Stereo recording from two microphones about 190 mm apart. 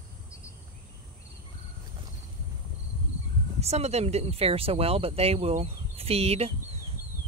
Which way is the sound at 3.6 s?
35° right (ahead or behind).